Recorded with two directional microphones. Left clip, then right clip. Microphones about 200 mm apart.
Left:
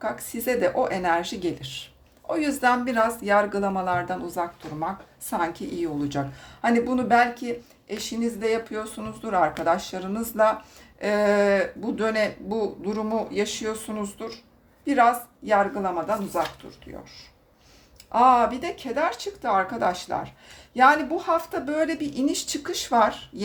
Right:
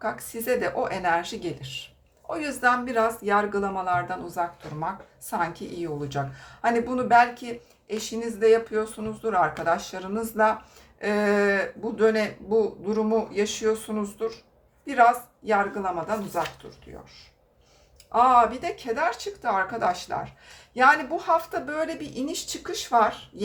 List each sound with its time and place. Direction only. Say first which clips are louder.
0.0 s speech: left 1 dB; 25° left (ahead or behind)
15.4 s speech: left 2 dB; 25° left (ahead or behind)
18.1 s speech: even; 30° left (ahead or behind)